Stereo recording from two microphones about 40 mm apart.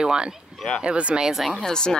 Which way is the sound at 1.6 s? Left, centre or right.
Centre.